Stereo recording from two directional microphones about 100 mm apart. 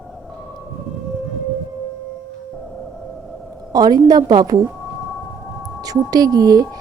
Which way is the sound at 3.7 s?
40° right (ahead or behind).